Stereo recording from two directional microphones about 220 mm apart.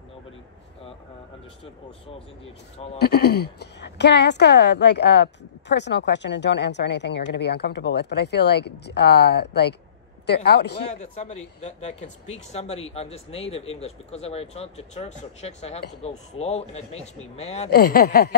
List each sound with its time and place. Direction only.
1.6 s speech: 25° left (ahead or behind)
3.0 s a woman's voice: 45° left (ahead or behind)
10.9 s speech: 30° left (ahead or behind)
17.6 s a woman's voice: 45° left (ahead or behind)